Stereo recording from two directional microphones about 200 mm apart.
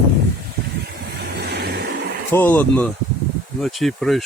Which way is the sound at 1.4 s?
55° right (ahead or behind).